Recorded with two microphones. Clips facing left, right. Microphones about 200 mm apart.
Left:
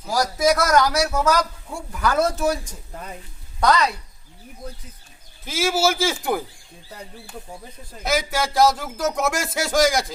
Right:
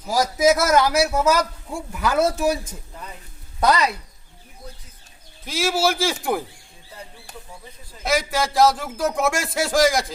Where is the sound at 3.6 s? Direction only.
10° right (ahead or behind).